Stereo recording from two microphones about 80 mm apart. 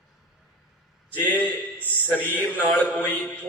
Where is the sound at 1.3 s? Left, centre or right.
Left.